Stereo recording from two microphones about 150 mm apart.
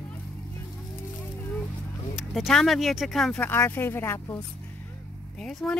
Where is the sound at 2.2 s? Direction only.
Centre (ahead or behind); by 4.4 s 15° left (ahead or behind).